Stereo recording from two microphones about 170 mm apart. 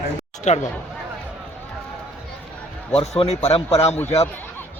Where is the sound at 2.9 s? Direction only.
35° left (ahead or behind).